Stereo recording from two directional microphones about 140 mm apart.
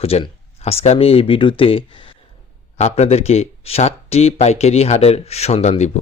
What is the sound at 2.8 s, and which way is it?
Speech, 50° left (ahead or behind).